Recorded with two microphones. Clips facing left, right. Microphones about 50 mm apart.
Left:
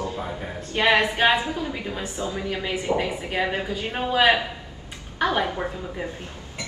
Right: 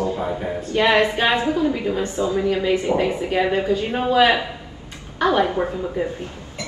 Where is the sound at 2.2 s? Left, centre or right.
Centre.